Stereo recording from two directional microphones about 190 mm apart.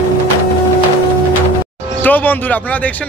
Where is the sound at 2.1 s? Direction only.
10° left (ahead or behind).